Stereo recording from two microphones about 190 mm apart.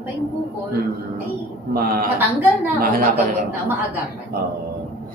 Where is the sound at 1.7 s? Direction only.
50° right (ahead or behind).